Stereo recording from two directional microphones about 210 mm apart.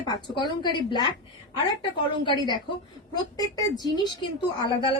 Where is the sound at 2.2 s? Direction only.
20° left (ahead or behind).